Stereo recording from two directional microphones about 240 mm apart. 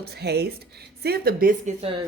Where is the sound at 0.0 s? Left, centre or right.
Right.